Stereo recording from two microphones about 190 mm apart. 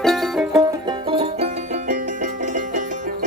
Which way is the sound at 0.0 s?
Centre (ahead or behind).